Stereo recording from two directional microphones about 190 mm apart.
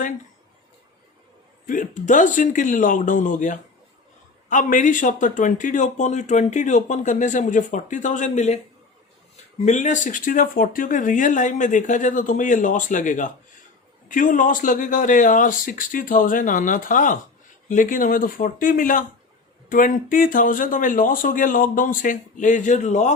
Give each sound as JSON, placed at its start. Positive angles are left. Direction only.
{"t": 1.6, "sound": "a man's voice", "side_deg": 45}
{"t": 9.6, "sound": "speech", "side_deg": 40}